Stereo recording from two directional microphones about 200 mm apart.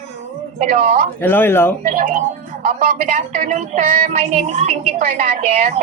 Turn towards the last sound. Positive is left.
turn(degrees=-35)  # may be behind; listen again after turning